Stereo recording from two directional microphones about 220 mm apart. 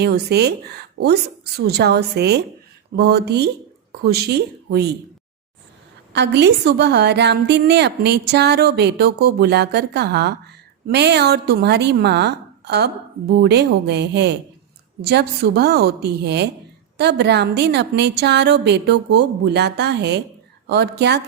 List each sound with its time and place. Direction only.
0.0 s a woman's voice: 50° right (ahead or behind)
6.1 s a woman's voice: 50° right (ahead or behind)